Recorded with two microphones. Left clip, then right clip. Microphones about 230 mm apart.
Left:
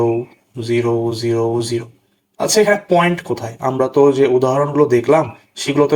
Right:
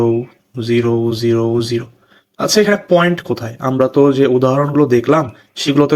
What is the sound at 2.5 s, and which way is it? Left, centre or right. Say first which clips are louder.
Speech: right 1 dB; right.